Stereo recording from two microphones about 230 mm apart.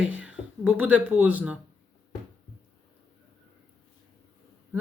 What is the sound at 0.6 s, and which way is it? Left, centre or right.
Speech, centre.